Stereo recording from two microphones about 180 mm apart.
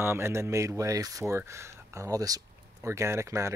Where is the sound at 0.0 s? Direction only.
15° right (ahead or behind).